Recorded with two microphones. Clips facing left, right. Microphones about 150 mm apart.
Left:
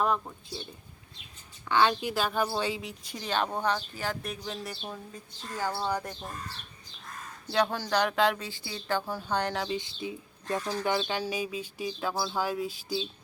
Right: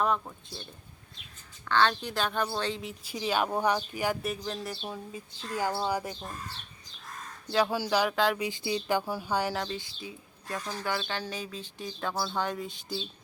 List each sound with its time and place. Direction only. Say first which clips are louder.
0.0 s a woman's voice: even; centre (ahead or behind)
1.6 s a woman's voice: left 1 dB; 10° left (ahead or behind); by 6.3 s 5° right (ahead or behind)
7.4 s a woman's voice: right 1 dB; 5° right (ahead or behind)
8.4 s speech: right 8 dB; 20° right (ahead or behind)
9.6 s speech: left 5 dB; 20° left (ahead or behind); by 13.1 s 5° left (ahead or behind)